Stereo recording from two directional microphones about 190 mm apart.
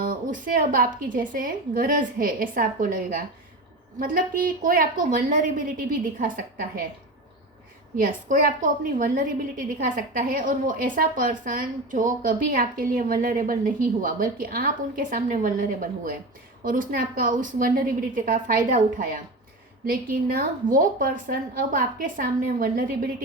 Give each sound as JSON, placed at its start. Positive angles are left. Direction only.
{"t": 0.0, "sound": "a woman's voice", "side_deg": -45}
{"t": 7.9, "sound": "a woman's voice", "side_deg": -45}